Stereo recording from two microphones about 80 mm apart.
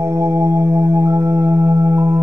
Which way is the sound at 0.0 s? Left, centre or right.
Right.